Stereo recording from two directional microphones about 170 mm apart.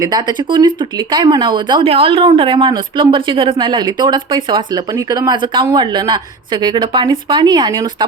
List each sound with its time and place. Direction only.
0.0 s speech: 25° right (ahead or behind)